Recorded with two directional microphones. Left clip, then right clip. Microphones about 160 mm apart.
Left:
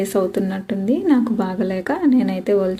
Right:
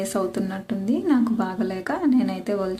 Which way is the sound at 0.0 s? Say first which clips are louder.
Left 6 dB; 15° left (ahead or behind).